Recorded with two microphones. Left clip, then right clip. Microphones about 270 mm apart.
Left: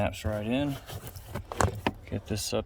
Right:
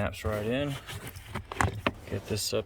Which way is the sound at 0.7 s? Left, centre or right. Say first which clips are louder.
Even; left.